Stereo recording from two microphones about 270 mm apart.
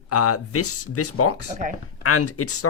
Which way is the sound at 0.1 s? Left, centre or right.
Left.